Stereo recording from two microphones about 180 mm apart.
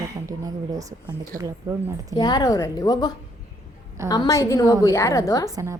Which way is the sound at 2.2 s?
20° left (ahead or behind).